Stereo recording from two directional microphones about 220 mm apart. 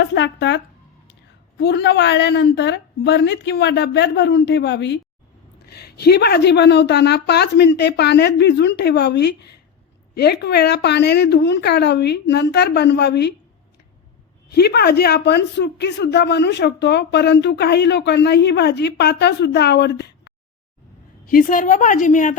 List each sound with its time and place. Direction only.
0.0 s speech: 50° left (ahead or behind)
14.5 s speech: 45° left (ahead or behind)
21.2 s a woman's voice: 40° left (ahead or behind)